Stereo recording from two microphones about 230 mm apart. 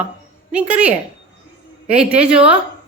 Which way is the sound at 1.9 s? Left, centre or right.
Centre.